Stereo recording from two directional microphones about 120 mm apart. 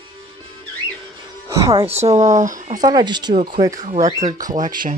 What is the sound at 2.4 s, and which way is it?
Speech, 90° right.